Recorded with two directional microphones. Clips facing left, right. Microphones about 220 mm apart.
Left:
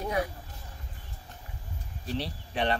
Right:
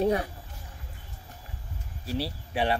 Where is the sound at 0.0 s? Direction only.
30° right (ahead or behind).